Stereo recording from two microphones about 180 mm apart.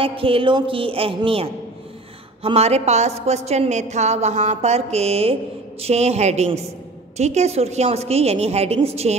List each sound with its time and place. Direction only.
0.0 s a woman's voice: 30° right (ahead or behind)